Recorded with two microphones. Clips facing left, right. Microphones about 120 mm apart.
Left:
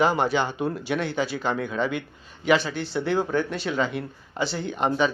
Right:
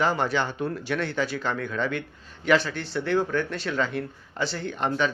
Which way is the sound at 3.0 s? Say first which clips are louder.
Even; 10° left (ahead or behind).